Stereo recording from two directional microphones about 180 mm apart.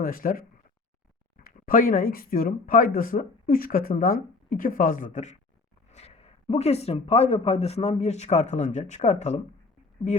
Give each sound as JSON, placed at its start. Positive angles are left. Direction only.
{"t": 0.0, "sound": "speech", "side_deg": 50}
{"t": 1.5, "sound": "speech", "side_deg": 50}